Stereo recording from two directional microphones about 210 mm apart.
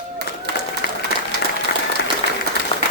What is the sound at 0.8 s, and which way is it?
Applause, 50° left (ahead or behind).